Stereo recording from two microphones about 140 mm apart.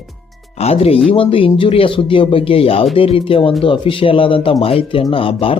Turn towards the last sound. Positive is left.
turn(degrees=40)  # may be behind; listen again after turning